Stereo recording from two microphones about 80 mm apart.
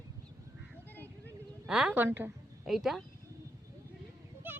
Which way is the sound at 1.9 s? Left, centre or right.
Right.